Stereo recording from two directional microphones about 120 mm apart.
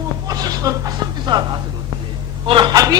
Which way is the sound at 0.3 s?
30° right (ahead or behind).